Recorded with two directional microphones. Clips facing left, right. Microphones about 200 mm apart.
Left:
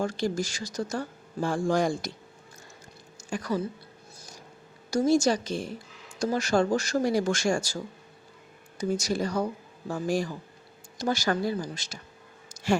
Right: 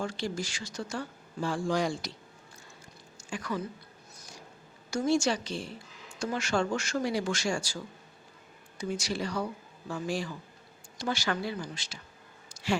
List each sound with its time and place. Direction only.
0.0 s speech: 45° left (ahead or behind)
3.2 s speech: 40° left (ahead or behind)
4.9 s speech: 35° left (ahead or behind)
8.8 s speech: 40° left (ahead or behind)